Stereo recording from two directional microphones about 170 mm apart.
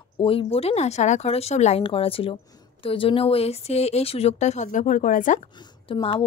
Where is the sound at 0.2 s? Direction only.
30° left (ahead or behind); by 5.4 s 50° left (ahead or behind).